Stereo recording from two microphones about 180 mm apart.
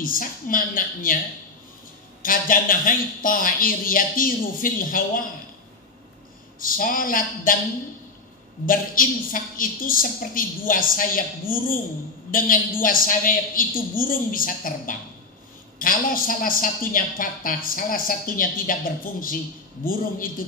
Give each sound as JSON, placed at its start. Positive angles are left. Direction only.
{"t": 0.0, "sound": "a woman's voice", "side_deg": 50}
{"t": 2.2, "sound": "a woman's voice", "side_deg": 50}
{"t": 6.6, "sound": "a woman's voice", "side_deg": 50}
{"t": 8.6, "sound": "a woman's voice", "side_deg": 50}